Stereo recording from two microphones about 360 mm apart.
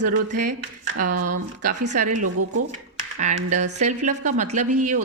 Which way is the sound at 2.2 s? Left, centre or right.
Right.